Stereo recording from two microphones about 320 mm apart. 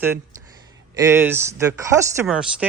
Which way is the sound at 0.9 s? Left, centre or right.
Centre.